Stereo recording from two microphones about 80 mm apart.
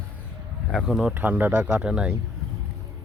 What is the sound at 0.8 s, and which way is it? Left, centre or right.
Speech, centre.